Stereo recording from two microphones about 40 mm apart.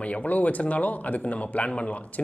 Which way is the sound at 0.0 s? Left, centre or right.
Left.